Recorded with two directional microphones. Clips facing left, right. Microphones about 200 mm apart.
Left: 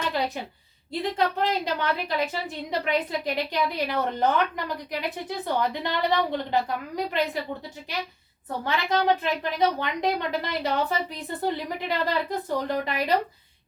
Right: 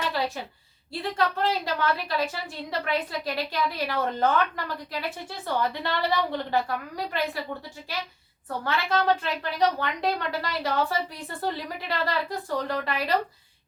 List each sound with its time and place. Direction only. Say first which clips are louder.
1.0 s a woman's voice: left 1 dB; 20° left (ahead or behind)
8.6 s a woman's voice: left 1 dB; 15° left (ahead or behind)